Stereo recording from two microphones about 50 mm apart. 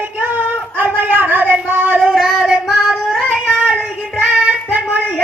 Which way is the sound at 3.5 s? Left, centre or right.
Centre.